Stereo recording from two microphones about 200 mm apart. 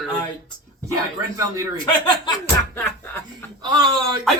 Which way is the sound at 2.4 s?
10° left (ahead or behind).